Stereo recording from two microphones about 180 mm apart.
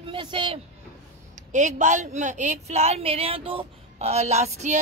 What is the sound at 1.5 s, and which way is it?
A woman's voice, 40° right (ahead or behind).